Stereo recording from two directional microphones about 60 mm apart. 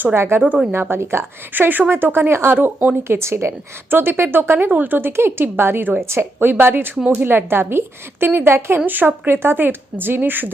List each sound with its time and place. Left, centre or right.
0.0 s speech: right
1.5 s speech: right
3.0 s speech: right
3.8 s speech: right